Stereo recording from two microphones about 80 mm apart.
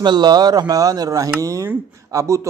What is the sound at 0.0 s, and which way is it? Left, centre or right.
Speech, right.